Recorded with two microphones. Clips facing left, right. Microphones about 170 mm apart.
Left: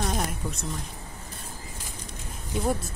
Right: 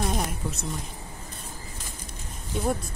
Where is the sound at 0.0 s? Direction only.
5° right (ahead or behind).